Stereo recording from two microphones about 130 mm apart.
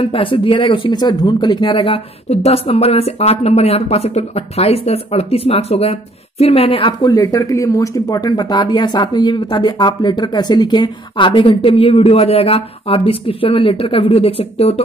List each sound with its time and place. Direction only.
0.0 s speech: 45° left (ahead or behind)